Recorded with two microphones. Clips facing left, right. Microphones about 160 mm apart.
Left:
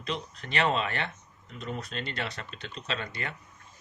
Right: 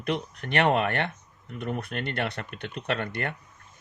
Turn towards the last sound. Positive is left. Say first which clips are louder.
# right 6 dB
turn(degrees=-60)  # may be behind; listen again after turning